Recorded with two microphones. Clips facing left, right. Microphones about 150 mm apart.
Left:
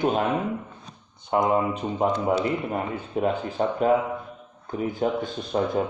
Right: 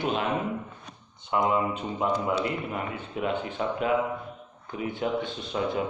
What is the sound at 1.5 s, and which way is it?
Speech, 45° left (ahead or behind).